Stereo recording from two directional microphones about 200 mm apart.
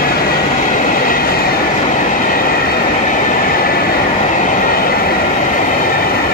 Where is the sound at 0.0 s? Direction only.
50° left (ahead or behind).